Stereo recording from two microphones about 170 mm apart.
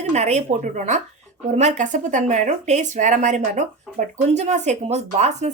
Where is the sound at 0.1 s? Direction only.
45° right (ahead or behind).